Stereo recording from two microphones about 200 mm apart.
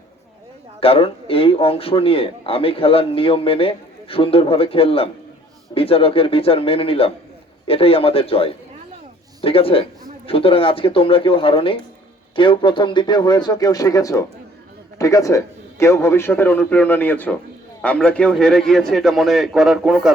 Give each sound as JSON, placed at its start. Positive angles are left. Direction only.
{"t": 0.8, "sound": "a man's voice", "side_deg": 30}